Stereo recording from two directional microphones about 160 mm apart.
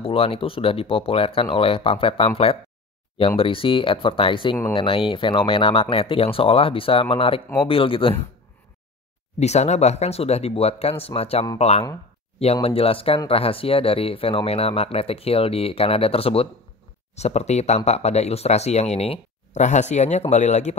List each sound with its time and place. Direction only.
0.0 s speech: 35° left (ahead or behind)
9.4 s speech: 45° left (ahead or behind)